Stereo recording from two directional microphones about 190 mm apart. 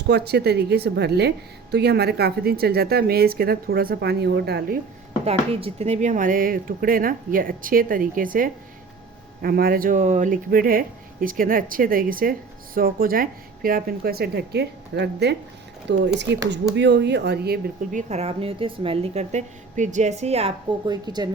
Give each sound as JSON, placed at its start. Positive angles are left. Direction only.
{"t": 0.1, "sound": "a woman's voice", "side_deg": -60}
{"t": 5.2, "sound": "a woman's voice", "side_deg": -30}
{"t": 17.9, "sound": "a woman's voice", "side_deg": -35}
{"t": 20.8, "sound": "speech", "side_deg": -20}